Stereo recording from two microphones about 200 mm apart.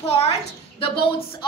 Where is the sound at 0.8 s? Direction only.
25° left (ahead or behind).